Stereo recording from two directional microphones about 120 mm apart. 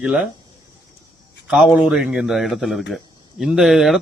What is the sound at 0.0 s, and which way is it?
Speech, 10° right (ahead or behind).